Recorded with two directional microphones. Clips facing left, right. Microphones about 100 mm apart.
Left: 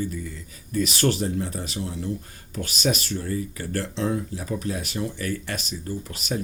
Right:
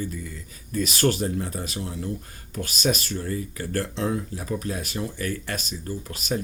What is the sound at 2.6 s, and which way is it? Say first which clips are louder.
Speech: even; 40° right (ahead or behind).